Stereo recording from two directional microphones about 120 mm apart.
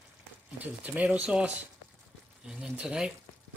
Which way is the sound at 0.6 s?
10° right (ahead or behind).